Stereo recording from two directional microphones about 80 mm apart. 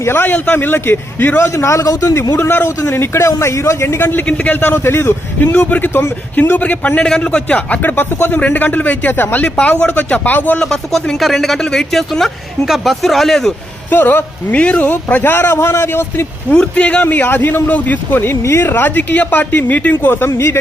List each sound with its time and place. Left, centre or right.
0.0 s a man's voice: left
2.3 s a man's voice: left
10.6 s speech: centre
13.9 s a man's voice: left
16.5 s a man's voice: centre; by 20.6 s left